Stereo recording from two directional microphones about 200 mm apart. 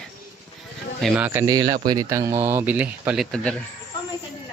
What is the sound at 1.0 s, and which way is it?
Speech, 5° right (ahead or behind).